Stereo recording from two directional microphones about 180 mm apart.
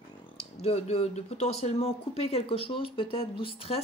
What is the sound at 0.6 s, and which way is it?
Speech, 35° left (ahead or behind).